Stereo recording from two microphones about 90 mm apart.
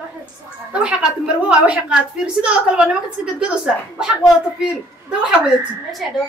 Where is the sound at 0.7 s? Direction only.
10° right (ahead or behind).